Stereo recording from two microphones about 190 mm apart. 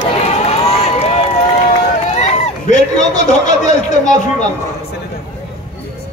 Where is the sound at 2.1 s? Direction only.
35° left (ahead or behind).